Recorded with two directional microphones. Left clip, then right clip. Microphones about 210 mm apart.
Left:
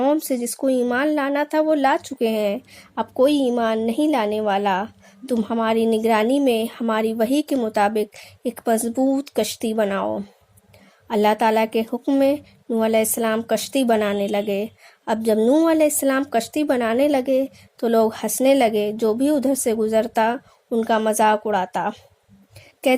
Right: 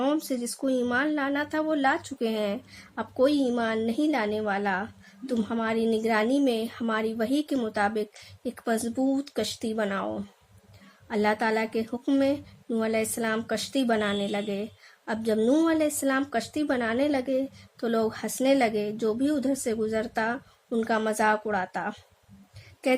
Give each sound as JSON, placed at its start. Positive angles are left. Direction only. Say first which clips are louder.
{"t": 0.0, "sound": "speech", "louder": "left 7 dB", "side_deg": 25}